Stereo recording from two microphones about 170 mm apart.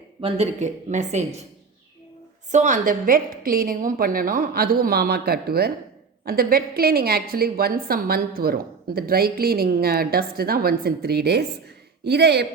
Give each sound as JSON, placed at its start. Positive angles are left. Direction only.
{"t": 0.2, "sound": "speech", "side_deg": -35}
{"t": 2.5, "sound": "a woman's voice", "side_deg": -50}